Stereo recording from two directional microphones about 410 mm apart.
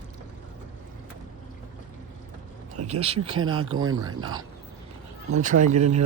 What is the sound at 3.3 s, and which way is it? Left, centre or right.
Speech, right.